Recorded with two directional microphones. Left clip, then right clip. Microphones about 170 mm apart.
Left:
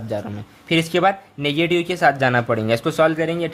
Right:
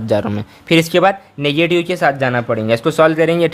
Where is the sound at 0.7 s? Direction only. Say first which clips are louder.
Right 5 dB; 35° right (ahead or behind).